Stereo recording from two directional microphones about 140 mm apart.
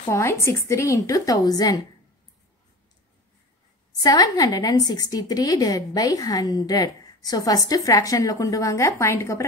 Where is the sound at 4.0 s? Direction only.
25° left (ahead or behind).